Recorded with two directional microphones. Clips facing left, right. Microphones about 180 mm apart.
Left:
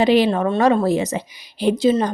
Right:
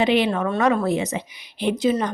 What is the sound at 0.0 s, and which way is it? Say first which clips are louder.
A woman's voice: left 4 dB; 35° left (ahead or behind).